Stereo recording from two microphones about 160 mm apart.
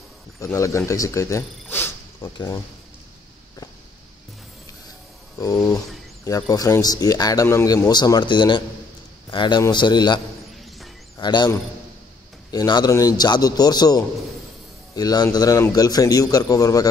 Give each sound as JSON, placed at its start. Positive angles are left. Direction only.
{"t": 0.4, "sound": "speech", "side_deg": 20}
{"t": 5.4, "sound": "a man's voice", "side_deg": 20}